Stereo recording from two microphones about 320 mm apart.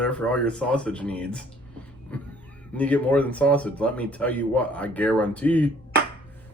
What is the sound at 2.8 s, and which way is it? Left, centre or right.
Speech, centre.